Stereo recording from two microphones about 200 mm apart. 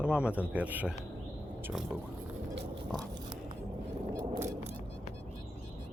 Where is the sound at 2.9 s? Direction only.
20° right (ahead or behind).